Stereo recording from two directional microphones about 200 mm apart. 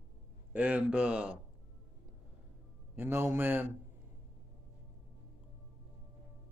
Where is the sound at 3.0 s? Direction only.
10° right (ahead or behind).